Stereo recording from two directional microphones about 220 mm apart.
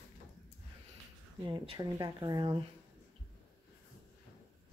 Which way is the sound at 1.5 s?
25° right (ahead or behind).